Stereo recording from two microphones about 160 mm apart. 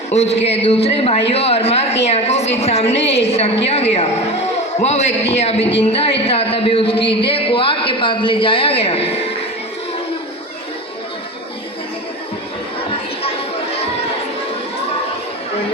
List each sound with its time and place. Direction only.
0.1 s a man's voice: 45° left (ahead or behind)